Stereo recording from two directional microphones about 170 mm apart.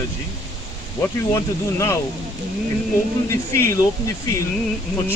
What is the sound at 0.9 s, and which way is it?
Speech, 15° left (ahead or behind).